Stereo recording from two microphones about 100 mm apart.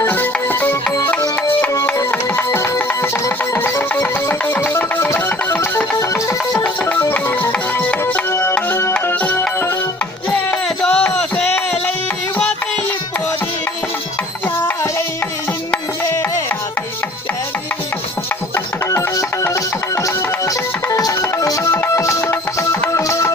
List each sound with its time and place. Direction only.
0.0 s music: 20° left (ahead or behind)
8.3 s music: 25° left (ahead or behind); by 11.4 s 10° left (ahead or behind)
14.4 s a sound: 20° left (ahead or behind)
16.0 s music: 30° left (ahead or behind)
18.5 s music: 30° left (ahead or behind)